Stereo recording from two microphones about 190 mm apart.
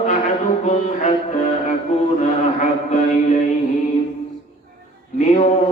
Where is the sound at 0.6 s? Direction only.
40° left (ahead or behind).